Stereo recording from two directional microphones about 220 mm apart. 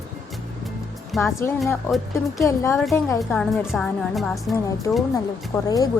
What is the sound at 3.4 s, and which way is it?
Speech, centre (ahead or behind).